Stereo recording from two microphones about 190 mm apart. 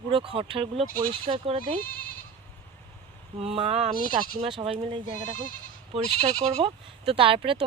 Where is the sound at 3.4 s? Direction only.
30° right (ahead or behind).